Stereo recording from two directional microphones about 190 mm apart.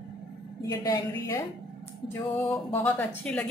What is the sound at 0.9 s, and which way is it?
Speech, 15° left (ahead or behind).